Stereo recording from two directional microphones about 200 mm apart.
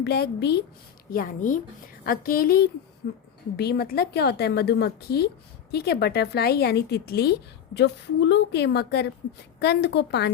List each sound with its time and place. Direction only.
0.0 s a woman's voice: 55° left (ahead or behind)
1.1 s a woman's voice: 45° left (ahead or behind)